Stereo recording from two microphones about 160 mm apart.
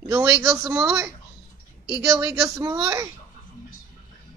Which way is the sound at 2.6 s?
20° right (ahead or behind).